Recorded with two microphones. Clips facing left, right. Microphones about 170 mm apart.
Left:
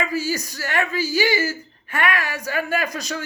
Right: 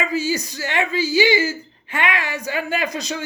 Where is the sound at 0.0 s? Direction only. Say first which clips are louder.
Right 2 dB; 20° right (ahead or behind).